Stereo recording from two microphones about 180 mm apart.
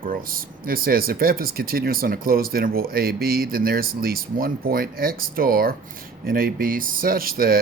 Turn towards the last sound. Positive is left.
turn(degrees=-55)  # may be behind; listen again after turning